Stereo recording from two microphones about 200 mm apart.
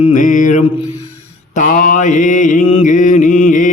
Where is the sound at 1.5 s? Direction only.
40° left (ahead or behind).